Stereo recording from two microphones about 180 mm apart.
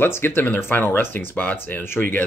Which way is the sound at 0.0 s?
10° left (ahead or behind).